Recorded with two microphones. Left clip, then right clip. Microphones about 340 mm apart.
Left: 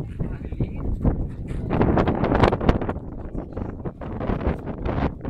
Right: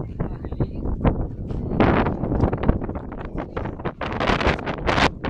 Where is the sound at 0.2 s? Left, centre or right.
Right.